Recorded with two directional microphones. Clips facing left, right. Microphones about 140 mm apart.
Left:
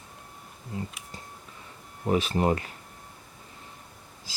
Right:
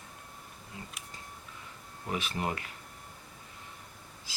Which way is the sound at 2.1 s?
35° left (ahead or behind).